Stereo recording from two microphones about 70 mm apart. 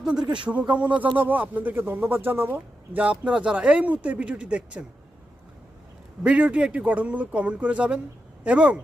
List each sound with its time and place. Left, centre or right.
0.0 s speech: centre
6.2 s speech: centre